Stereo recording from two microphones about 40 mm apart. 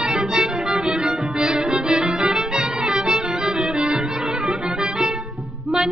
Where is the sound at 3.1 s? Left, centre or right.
Right.